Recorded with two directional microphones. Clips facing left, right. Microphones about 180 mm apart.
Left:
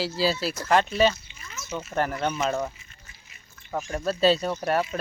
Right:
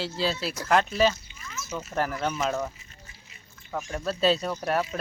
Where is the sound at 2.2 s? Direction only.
Centre (ahead or behind).